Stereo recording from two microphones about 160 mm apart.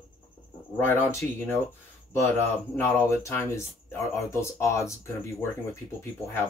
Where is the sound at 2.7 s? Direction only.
15° left (ahead or behind).